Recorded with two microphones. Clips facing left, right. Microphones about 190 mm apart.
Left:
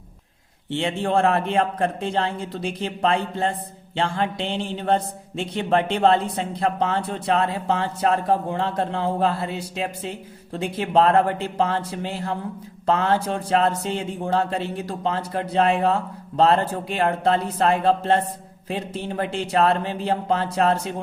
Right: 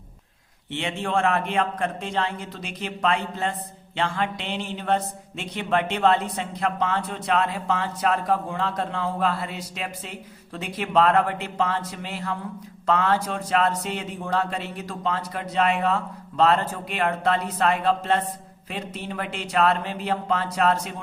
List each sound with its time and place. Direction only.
0.7 s a man's voice: 35° left (ahead or behind)